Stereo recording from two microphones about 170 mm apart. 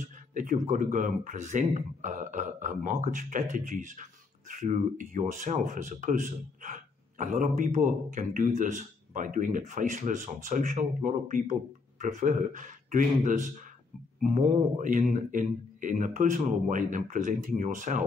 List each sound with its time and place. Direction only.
0.0 s speech: 50° right (ahead or behind)